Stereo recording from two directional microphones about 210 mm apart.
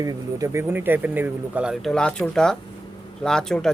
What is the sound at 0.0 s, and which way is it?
Speech, 15° right (ahead or behind).